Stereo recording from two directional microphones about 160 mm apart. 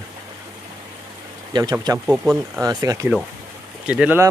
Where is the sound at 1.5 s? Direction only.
25° right (ahead or behind).